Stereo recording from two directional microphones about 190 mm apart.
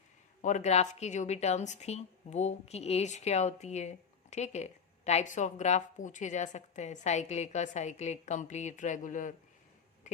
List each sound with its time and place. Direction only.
0.4 s a woman's voice: 40° left (ahead or behind)